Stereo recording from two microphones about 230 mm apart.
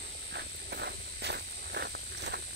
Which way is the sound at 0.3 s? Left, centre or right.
Right.